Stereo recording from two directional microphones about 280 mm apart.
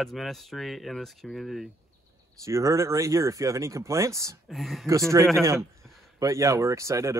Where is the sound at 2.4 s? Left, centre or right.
Centre.